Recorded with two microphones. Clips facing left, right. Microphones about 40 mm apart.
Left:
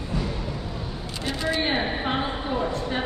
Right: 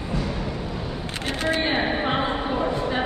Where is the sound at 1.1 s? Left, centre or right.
Right.